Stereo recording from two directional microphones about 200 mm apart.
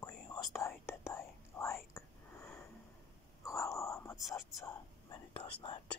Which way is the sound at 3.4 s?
15° left (ahead or behind).